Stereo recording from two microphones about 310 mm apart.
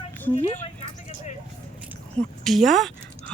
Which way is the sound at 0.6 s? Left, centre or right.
Left.